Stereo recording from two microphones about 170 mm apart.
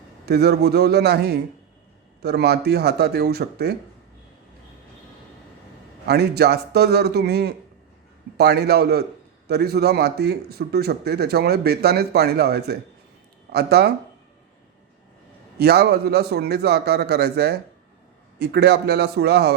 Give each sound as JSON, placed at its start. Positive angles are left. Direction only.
{"t": 0.3, "sound": "a man's voice", "side_deg": -75}
{"t": 6.1, "sound": "a man's voice", "side_deg": -70}
{"t": 15.5, "sound": "a man's voice", "side_deg": -70}